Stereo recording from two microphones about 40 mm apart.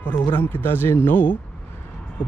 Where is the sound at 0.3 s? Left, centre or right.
Left.